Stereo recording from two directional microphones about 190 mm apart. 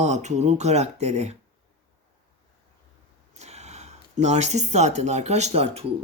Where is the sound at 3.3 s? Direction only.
35° right (ahead or behind).